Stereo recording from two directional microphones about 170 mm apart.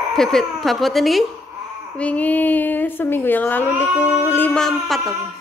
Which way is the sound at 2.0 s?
10° left (ahead or behind).